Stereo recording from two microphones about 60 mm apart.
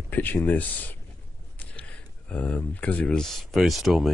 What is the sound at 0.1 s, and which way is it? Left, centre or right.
Speech, left.